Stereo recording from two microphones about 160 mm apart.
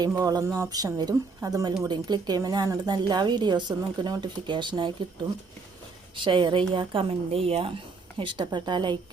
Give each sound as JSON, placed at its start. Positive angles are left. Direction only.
{"t": 0.1, "sound": "a woman's voice", "side_deg": -25}
{"t": 6.1, "sound": "a woman's voice", "side_deg": -30}